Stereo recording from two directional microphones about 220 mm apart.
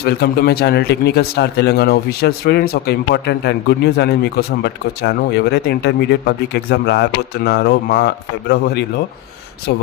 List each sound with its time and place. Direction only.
0.0 s speech: 45° left (ahead or behind)